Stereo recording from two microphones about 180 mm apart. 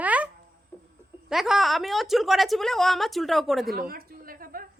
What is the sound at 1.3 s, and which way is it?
A woman's voice, centre (ahead or behind).